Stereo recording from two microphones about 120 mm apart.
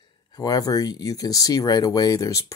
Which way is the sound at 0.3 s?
30° left (ahead or behind).